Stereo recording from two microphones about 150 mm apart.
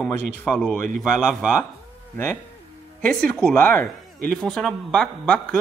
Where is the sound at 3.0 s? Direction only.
5° left (ahead or behind).